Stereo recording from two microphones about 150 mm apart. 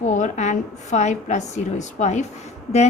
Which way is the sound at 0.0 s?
55° left (ahead or behind).